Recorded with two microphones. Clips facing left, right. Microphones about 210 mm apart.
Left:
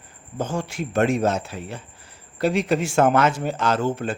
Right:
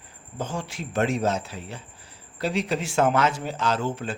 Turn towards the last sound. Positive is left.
turn(degrees=50)  # may be behind; listen again after turning